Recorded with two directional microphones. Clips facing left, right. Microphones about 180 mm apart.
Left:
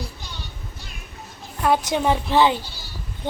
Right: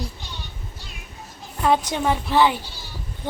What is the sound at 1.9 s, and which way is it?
Speech, 20° left (ahead or behind).